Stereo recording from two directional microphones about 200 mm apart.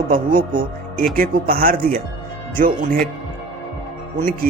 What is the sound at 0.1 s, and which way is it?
Speech, 45° right (ahead or behind).